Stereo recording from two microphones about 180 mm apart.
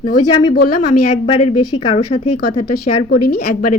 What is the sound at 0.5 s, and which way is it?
Speech, 55° left (ahead or behind).